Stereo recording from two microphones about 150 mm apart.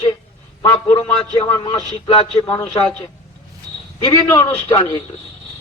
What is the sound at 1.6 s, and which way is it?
Speech, 35° left (ahead or behind).